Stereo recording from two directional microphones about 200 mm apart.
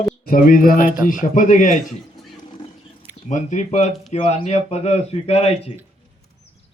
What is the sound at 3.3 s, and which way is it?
Speech, 35° left (ahead or behind).